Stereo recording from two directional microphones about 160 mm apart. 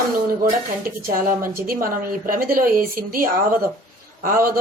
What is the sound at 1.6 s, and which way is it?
A woman's voice, 65° right (ahead or behind).